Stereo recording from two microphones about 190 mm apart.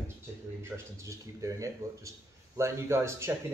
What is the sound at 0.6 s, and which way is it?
A man's voice, 15° right (ahead or behind).